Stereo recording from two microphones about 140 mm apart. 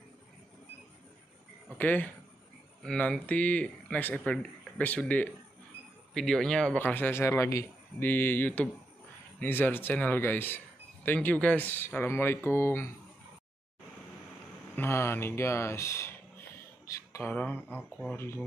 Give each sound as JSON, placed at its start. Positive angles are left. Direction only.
{"t": 1.8, "sound": "speech", "side_deg": 10}
{"t": 14.8, "sound": "speech", "side_deg": 15}
{"t": 16.8, "sound": "a sound", "side_deg": 20}
{"t": 17.3, "sound": "speech", "side_deg": 10}
{"t": 17.6, "sound": "speech", "side_deg": -10}
{"t": 18.1, "sound": "speech", "side_deg": 20}